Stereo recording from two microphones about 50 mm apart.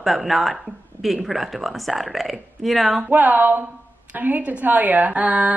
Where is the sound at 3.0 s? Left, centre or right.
Right.